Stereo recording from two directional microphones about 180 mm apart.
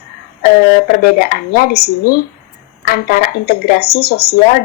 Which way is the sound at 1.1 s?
55° left (ahead or behind).